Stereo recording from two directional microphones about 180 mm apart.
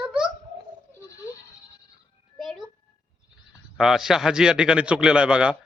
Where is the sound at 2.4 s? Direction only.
Centre (ahead or behind).